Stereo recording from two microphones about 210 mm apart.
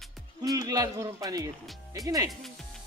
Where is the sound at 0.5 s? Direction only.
15° right (ahead or behind).